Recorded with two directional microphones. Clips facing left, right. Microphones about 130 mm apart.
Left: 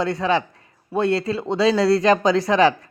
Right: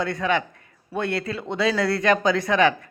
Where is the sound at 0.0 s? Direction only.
35° left (ahead or behind).